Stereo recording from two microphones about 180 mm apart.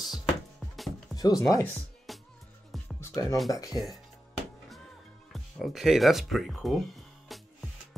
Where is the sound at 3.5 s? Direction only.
20° left (ahead or behind).